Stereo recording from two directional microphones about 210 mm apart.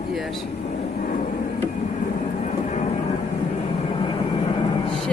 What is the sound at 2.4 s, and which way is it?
Vehicle, 35° left (ahead or behind).